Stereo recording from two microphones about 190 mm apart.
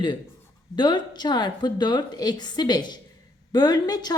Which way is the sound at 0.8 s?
25° left (ahead or behind).